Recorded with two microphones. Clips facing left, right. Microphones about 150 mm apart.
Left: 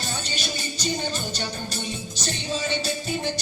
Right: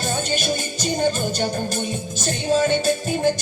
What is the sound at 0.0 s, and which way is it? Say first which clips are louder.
Music: right 8 dB; 50° right (ahead or behind).